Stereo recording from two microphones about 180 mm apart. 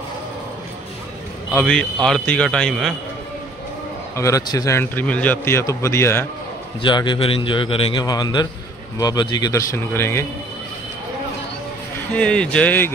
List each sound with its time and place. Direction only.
1.5 s a man's voice: 10° left (ahead or behind)
4.2 s speech: 20° left (ahead or behind)
6.8 s a man's voice: 25° left (ahead or behind)
12.2 s speech: 5° left (ahead or behind)